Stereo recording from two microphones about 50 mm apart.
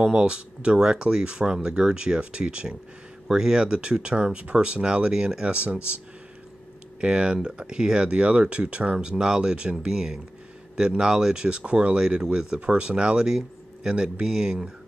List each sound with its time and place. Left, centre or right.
0.0 s speech: centre
7.0 s speech: right